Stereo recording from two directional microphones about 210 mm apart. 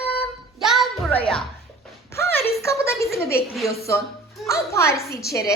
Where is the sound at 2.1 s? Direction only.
10° left (ahead or behind).